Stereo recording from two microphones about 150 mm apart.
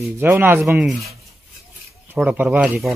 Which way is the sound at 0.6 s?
Centre (ahead or behind).